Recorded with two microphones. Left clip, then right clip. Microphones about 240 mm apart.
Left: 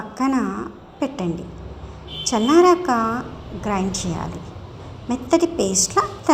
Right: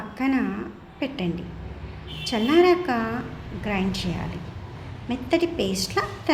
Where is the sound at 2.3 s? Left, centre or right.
Centre.